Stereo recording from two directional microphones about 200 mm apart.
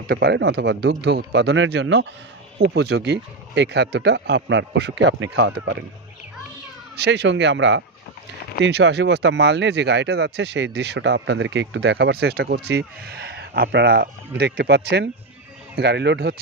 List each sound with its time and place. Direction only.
0.1 s speech: 55° right (ahead or behind)
7.0 s speech: 60° right (ahead or behind)